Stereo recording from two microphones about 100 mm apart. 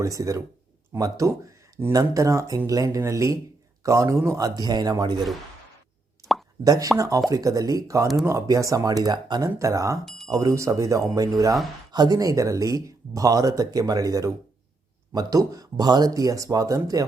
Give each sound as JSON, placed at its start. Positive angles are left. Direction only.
{"t": 0.0, "sound": "speech", "side_deg": -35}
{"t": 6.2, "sound": "plop", "side_deg": -35}
{"t": 6.7, "sound": "speech", "side_deg": -35}
{"t": 9.0, "sound": "speech", "side_deg": -50}
{"t": 9.4, "sound": "speech", "side_deg": -30}